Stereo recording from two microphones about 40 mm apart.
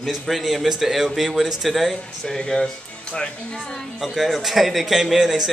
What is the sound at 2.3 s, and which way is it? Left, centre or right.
Speech, centre.